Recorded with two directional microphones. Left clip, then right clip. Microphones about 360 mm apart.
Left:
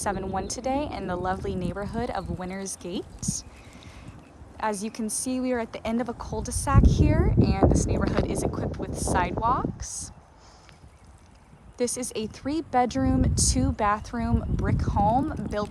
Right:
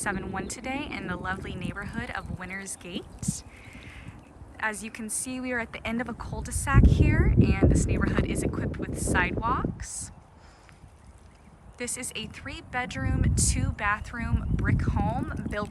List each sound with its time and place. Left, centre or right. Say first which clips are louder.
0.0 s speech: left 3 dB; centre
11.8 s speech: left 6 dB; centre